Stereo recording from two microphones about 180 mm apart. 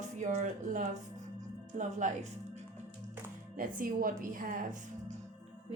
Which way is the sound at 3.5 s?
50° right (ahead or behind).